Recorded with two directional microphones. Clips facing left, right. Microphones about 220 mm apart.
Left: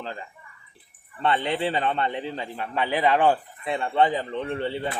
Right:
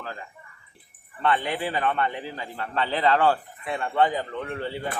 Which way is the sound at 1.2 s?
25° left (ahead or behind).